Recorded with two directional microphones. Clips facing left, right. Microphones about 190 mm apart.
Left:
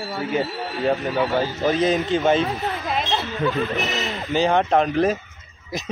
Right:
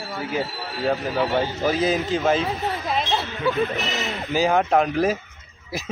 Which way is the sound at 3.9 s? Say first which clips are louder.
Even; 5° right (ahead or behind).